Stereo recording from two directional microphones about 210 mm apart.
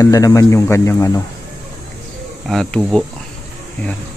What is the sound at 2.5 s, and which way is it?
Speech, centre (ahead or behind).